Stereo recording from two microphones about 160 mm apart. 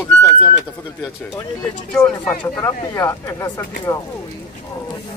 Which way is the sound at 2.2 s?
15° left (ahead or behind).